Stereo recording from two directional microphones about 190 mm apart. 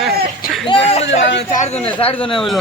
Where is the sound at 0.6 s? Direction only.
30° left (ahead or behind).